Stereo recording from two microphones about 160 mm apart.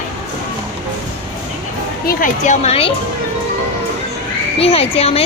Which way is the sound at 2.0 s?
55° left (ahead or behind).